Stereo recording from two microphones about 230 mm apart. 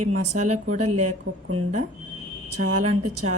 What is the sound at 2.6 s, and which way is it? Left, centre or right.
Speech, right.